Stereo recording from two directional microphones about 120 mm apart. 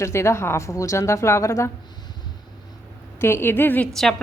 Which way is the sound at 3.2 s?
20° left (ahead or behind).